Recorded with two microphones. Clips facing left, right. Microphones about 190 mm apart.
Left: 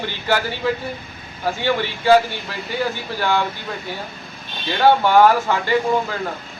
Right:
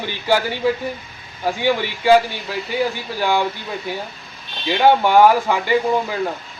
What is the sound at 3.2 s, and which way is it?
Speech, 15° right (ahead or behind).